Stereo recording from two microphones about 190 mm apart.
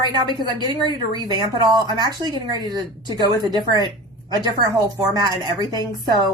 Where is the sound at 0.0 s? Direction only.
20° right (ahead or behind).